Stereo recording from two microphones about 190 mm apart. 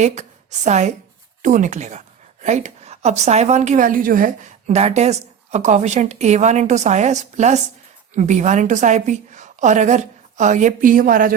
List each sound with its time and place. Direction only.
0.0 s a woman's voice: 35° right (ahead or behind)